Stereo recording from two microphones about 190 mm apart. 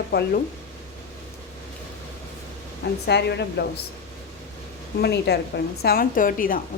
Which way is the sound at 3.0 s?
60° left (ahead or behind).